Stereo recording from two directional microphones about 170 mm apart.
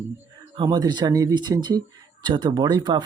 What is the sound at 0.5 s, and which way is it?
Speech, 25° right (ahead or behind).